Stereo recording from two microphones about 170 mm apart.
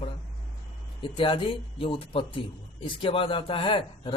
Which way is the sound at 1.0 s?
30° left (ahead or behind).